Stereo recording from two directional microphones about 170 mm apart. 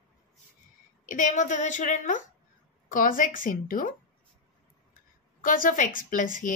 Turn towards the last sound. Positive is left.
turn(degrees=50)  # may be behind; listen again after turning